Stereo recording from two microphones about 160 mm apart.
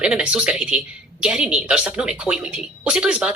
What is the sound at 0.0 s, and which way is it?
A woman's voice, 5° right (ahead or behind).